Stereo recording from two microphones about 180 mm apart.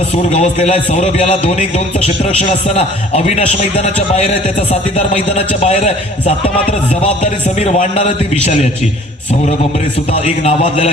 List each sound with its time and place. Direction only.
0.3 s a man's voice: 35° left (ahead or behind)
4.9 s a man's voice: 35° left (ahead or behind)
10.1 s a man's voice: 35° left (ahead or behind)